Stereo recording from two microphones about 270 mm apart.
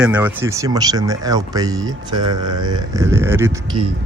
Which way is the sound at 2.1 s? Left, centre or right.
Right.